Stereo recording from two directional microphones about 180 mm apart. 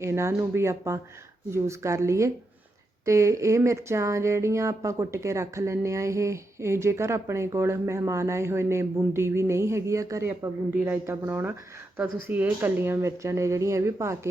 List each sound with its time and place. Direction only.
0.0 s speech: 15° right (ahead or behind)